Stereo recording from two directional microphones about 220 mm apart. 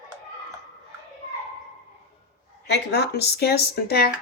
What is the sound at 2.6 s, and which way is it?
Speech, 50° left (ahead or behind).